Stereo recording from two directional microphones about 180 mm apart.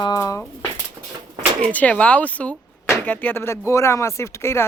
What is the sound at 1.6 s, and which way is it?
Speech, 5° left (ahead or behind).